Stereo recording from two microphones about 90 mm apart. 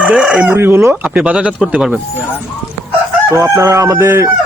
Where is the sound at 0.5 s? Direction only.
30° right (ahead or behind).